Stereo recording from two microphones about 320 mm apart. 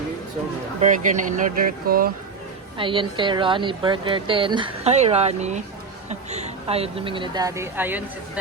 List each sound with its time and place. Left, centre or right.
0.8 s speech: right
2.7 s speech: centre